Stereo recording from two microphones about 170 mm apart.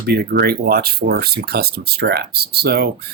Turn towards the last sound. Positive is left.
turn(degrees=-70)  # may be behind; listen again after turning